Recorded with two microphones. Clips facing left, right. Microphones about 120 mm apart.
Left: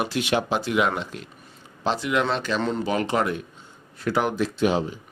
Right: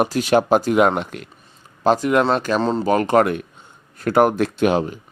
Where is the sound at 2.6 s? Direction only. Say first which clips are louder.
Right 5 dB; 35° right (ahead or behind).